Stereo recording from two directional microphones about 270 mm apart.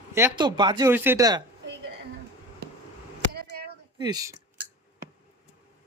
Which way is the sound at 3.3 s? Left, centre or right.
Right.